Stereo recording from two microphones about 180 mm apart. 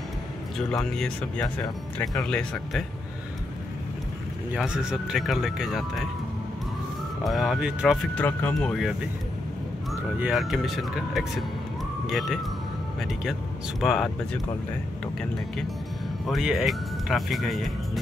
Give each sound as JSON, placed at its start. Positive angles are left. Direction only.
{"t": 0.6, "sound": "speech", "side_deg": 0}
{"t": 1.4, "sound": "speech", "side_deg": 20}
{"t": 2.1, "sound": "speech", "side_deg": 5}
{"t": 4.5, "sound": "speech", "side_deg": -5}
{"t": 7.2, "sound": "speech", "side_deg": 0}
{"t": 10.1, "sound": "speech", "side_deg": -5}
{"t": 16.3, "sound": "speech", "side_deg": 0}